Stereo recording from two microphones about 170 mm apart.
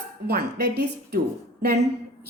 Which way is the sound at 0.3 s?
70° right (ahead or behind).